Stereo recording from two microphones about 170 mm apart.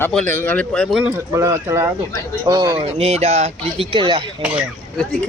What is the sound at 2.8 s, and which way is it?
A man's voice, 40° right (ahead or behind).